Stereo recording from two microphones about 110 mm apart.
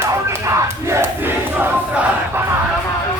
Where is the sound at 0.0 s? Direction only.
25° right (ahead or behind).